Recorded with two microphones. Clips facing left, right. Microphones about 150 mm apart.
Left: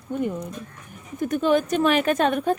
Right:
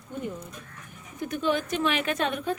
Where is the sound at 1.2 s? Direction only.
45° left (ahead or behind).